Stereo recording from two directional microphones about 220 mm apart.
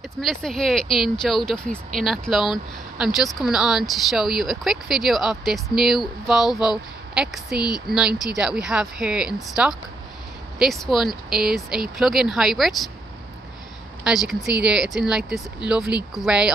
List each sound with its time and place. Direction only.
0.2 s a woman's voice: centre (ahead or behind)
8.1 s speech: 15° left (ahead or behind)
8.4 s speech: 5° right (ahead or behind)
14.0 s speech: centre (ahead or behind)